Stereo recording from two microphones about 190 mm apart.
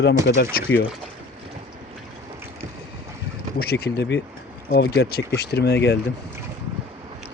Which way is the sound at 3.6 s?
55° left (ahead or behind).